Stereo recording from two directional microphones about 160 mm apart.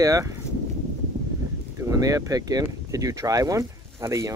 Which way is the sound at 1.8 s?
20° right (ahead or behind).